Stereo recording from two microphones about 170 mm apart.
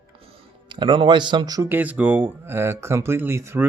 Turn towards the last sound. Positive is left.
turn(degrees=-15)  # may be behind; listen again after turning